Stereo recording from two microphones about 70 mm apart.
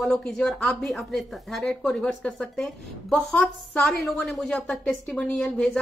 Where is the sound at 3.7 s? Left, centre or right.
Centre.